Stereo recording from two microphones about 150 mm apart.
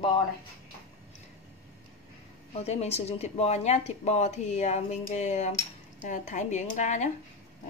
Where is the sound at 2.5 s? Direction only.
45° left (ahead or behind).